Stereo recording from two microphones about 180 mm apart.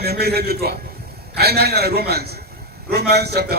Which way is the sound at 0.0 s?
60° right (ahead or behind).